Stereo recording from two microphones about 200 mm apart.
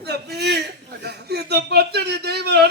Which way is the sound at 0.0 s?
55° right (ahead or behind).